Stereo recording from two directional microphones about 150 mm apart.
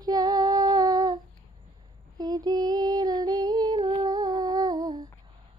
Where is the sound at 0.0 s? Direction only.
25° right (ahead or behind).